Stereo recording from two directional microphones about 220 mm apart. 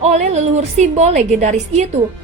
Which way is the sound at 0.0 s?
30° right (ahead or behind).